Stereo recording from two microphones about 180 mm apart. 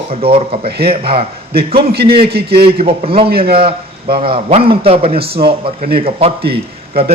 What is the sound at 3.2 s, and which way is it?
Speech, 60° right (ahead or behind).